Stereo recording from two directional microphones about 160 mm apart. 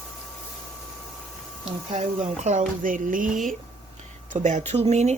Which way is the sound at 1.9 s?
45° right (ahead or behind).